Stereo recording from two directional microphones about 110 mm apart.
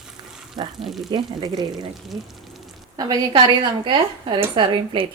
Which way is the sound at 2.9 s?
35° right (ahead or behind).